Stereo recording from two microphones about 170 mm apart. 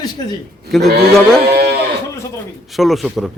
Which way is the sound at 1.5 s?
75° right (ahead or behind).